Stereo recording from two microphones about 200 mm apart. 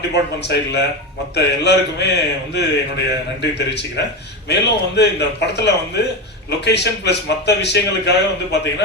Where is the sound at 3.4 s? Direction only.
60° left (ahead or behind).